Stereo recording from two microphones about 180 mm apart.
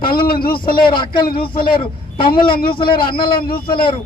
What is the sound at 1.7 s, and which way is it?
Speech, 30° left (ahead or behind).